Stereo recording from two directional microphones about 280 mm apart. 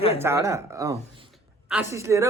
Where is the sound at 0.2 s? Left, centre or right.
Centre.